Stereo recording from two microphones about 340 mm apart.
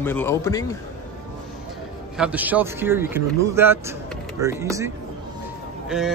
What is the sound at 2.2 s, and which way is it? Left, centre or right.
Speech, centre.